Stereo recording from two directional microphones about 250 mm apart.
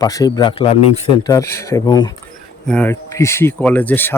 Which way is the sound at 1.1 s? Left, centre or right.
Centre.